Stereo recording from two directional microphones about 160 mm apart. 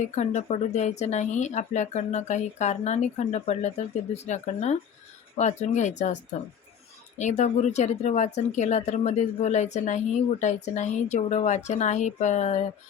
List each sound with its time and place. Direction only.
0.0 s a woman's voice: 45° left (ahead or behind)
7.2 s a woman's voice: 45° left (ahead or behind)